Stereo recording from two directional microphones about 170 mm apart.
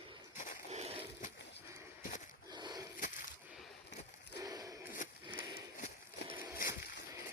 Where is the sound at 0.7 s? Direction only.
40° right (ahead or behind).